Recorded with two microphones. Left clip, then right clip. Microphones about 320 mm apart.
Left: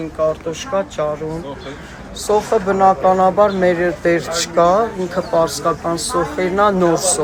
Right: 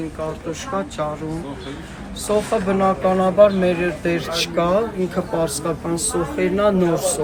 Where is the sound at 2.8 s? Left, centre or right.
Left.